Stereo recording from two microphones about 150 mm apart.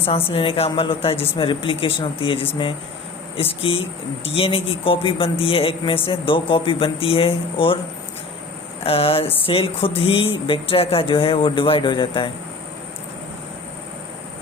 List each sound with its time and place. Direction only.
0.0 s speech: 40° left (ahead or behind)
8.8 s speech: 40° left (ahead or behind)